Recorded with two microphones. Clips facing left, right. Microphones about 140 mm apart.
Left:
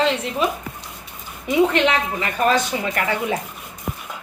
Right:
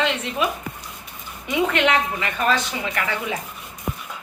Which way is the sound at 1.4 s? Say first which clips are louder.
Left 3 dB; 30° left (ahead or behind).